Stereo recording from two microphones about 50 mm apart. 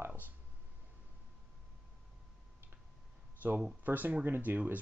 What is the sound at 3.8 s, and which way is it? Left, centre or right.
Speech, right.